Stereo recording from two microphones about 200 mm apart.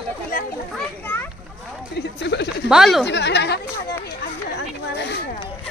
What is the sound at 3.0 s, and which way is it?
Speech, 60° left (ahead or behind).